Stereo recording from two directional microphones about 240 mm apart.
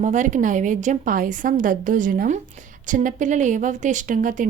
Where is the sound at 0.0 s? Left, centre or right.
Right.